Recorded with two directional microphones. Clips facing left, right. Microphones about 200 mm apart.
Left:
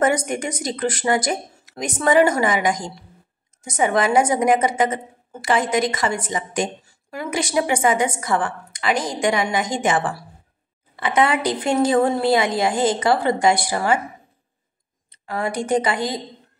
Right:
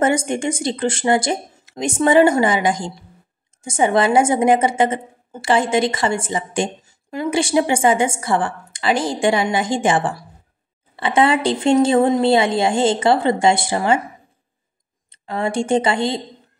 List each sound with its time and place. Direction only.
0.0 s a woman's voice: 25° right (ahead or behind)
15.0 s speech: 25° right (ahead or behind)